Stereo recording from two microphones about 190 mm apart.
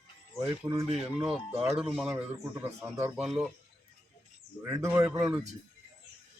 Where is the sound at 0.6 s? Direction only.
15° right (ahead or behind).